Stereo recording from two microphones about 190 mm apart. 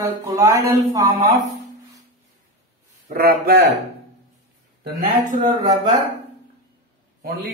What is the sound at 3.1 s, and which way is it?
Speech, 55° right (ahead or behind).